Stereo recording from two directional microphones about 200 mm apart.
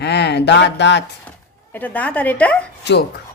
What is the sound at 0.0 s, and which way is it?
Speech, 55° left (ahead or behind).